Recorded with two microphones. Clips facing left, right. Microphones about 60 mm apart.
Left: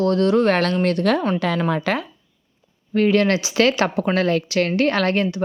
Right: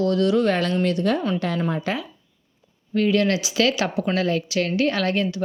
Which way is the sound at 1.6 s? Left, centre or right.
Left.